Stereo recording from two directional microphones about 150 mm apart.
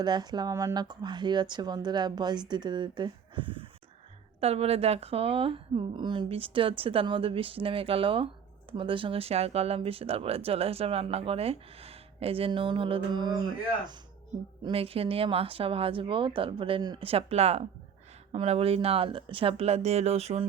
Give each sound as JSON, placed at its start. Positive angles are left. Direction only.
{"t": 0.0, "sound": "speech", "side_deg": -30}
{"t": 14.6, "sound": "speech", "side_deg": -40}